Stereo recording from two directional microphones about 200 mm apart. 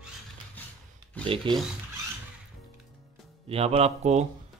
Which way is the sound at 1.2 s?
25° right (ahead or behind).